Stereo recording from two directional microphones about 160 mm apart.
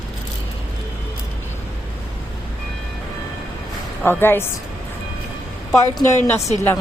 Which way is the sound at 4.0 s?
15° left (ahead or behind).